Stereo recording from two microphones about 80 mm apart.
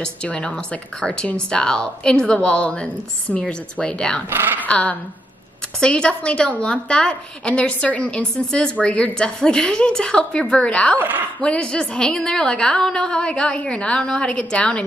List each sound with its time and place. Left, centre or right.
0.0 s a woman's voice: centre
4.3 s speech: right
4.6 s a woman's voice: centre
11.0 s speech: right
11.4 s a woman's voice: centre